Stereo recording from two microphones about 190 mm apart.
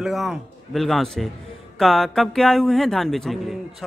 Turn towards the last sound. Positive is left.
turn(degrees=0)  # may be behind; listen again after turning